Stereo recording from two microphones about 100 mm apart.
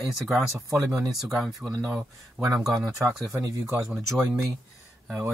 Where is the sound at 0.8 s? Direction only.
30° right (ahead or behind).